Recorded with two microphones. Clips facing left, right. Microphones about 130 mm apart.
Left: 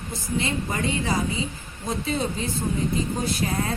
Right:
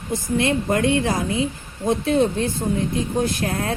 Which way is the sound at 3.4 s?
60° right (ahead or behind).